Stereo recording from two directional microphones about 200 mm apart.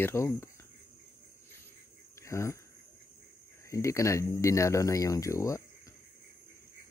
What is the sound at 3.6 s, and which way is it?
Speech, 15° left (ahead or behind).